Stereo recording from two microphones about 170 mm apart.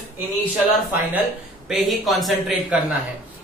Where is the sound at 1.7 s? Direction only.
Centre (ahead or behind).